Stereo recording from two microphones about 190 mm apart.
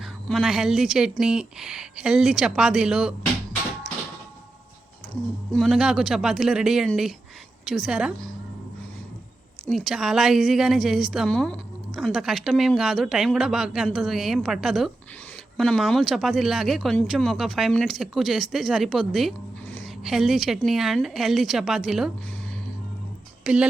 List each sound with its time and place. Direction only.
0.0 s a woman's voice: centre (ahead or behind)
5.5 s a woman's voice: 5° left (ahead or behind)
9.6 s a woman's voice: centre (ahead or behind)
23.4 s a woman's voice: 5° right (ahead or behind)